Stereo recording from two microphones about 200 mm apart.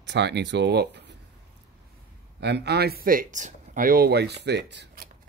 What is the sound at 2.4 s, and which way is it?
Speech, 55° right (ahead or behind).